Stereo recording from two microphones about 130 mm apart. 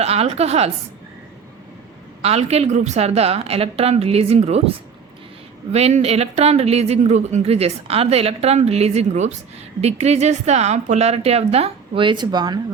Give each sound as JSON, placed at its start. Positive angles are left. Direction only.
{"t": 0.0, "sound": "a woman's voice", "side_deg": -50}
{"t": 2.2, "sound": "a woman's voice", "side_deg": -55}
{"t": 5.7, "sound": "a woman's voice", "side_deg": -55}